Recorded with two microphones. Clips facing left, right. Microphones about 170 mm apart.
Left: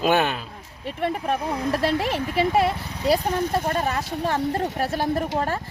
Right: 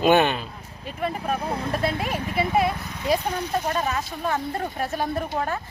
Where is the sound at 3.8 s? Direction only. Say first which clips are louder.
Left 2 dB; 35° left (ahead or behind).